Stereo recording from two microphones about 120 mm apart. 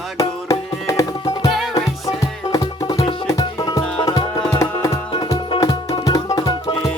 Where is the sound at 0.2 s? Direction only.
30° left (ahead or behind).